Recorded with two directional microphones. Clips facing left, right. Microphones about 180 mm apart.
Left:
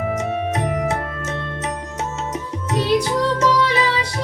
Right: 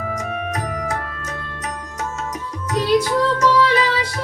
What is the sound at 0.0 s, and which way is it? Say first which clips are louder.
Music: left 4 dB; 25° left (ahead or behind).